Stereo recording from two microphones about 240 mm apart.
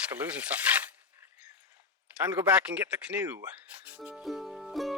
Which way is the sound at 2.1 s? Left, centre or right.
Centre.